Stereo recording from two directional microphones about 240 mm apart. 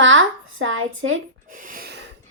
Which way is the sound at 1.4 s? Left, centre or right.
Right.